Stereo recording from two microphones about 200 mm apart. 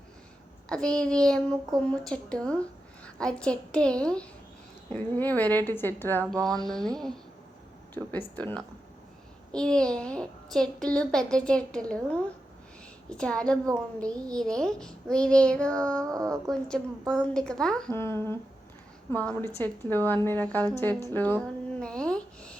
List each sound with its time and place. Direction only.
0.7 s a child's voice: 5° left (ahead or behind)
8.4 s a woman's voice: 10° left (ahead or behind)
16.0 s speech: 15° right (ahead or behind)
16.5 s a child's voice: 5° left (ahead or behind)
21.1 s a sound: 10° left (ahead or behind)